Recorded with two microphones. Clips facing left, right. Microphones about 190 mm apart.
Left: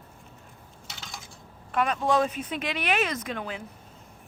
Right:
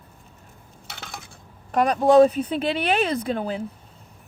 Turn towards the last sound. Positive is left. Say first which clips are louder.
# right 8 dB
turn(degrees=-35)  # may be behind; listen again after turning